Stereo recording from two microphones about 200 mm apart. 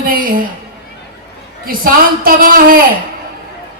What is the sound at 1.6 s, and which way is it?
A man's voice, 45° right (ahead or behind).